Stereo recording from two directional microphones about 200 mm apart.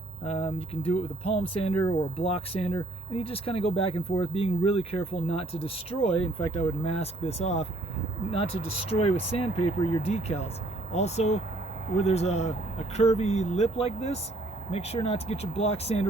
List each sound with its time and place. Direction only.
0.3 s speech: 30° left (ahead or behind)